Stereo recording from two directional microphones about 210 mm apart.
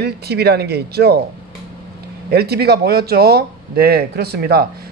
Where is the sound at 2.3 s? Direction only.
50° right (ahead or behind).